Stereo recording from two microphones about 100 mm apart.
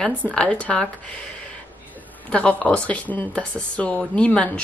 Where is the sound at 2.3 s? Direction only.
10° left (ahead or behind).